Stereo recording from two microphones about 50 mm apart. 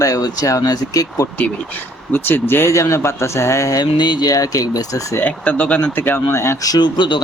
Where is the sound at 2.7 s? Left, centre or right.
Left.